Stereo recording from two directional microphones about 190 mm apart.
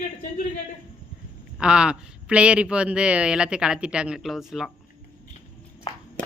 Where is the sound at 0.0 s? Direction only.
40° left (ahead or behind).